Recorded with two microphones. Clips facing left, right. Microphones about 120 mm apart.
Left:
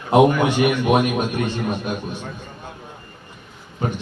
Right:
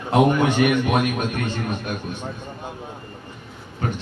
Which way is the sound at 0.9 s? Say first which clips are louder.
Left 3 dB; 15° left (ahead or behind).